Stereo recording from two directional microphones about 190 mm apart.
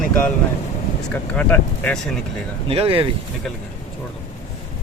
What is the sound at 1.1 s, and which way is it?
Speech, 5° left (ahead or behind).